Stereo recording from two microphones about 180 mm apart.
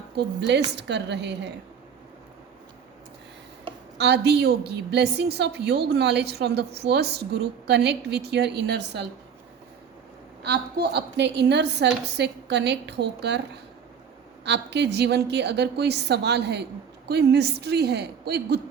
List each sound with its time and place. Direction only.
0.2 s a woman's voice: 70° right (ahead or behind)
3.9 s a woman's voice: 70° right (ahead or behind)
10.4 s a woman's voice: 65° right (ahead or behind)
14.4 s a woman's voice: 70° right (ahead or behind)